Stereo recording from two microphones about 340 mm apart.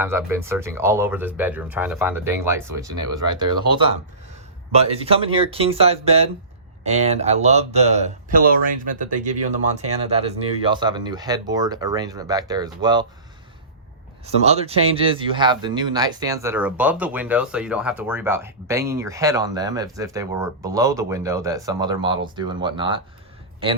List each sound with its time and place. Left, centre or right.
0.0 s speech: centre
14.4 s speech: centre